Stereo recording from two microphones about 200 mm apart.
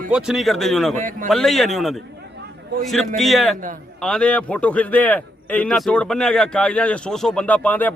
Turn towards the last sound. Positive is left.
turn(degrees=10)  # may be behind; listen again after turning